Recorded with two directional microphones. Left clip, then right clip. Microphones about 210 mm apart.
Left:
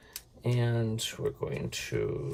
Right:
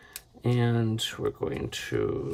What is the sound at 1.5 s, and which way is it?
Speech, 30° right (ahead or behind).